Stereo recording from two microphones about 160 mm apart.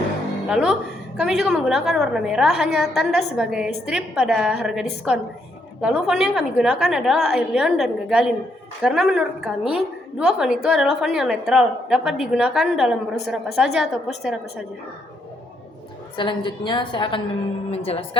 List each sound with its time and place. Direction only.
0.4 s a woman's voice: 5° right (ahead or behind)
16.1 s a woman's voice: 30° left (ahead or behind)